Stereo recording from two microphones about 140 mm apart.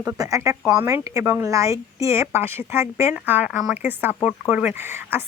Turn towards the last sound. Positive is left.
turn(degrees=-15)  # may be behind; listen again after turning